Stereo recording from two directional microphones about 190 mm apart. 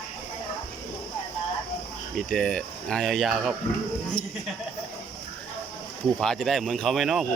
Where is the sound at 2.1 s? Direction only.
5° left (ahead or behind).